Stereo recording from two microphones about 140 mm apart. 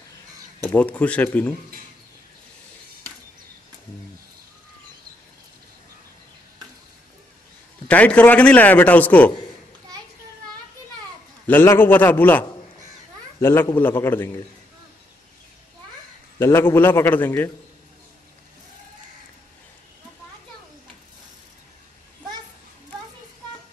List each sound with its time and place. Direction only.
0.7 s a man's voice: 10° left (ahead or behind)
7.9 s a man's voice: 10° left (ahead or behind)
11.4 s a man's voice: 15° left (ahead or behind)
16.3 s a man's voice: 15° left (ahead or behind)